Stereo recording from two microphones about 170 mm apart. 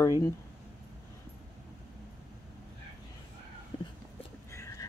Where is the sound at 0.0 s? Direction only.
20° left (ahead or behind).